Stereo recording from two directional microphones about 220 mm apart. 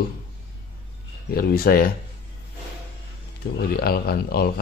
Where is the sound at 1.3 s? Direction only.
45° left (ahead or behind).